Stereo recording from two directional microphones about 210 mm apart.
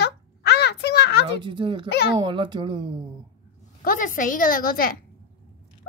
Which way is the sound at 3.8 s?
40° left (ahead or behind).